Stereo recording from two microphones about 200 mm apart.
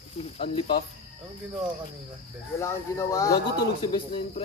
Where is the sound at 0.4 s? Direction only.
25° left (ahead or behind).